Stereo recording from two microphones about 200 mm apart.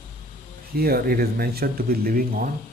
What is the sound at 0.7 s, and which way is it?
Speech, 50° right (ahead or behind).